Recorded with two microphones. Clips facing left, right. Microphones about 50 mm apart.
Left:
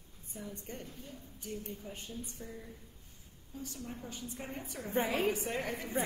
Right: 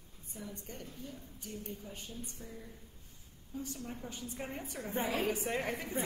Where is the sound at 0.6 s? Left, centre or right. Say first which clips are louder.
Left 2 dB; left.